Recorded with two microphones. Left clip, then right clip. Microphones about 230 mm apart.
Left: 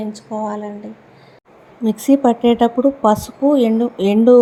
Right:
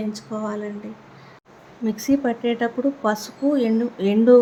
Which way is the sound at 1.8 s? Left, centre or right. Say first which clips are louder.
Left 8 dB; centre.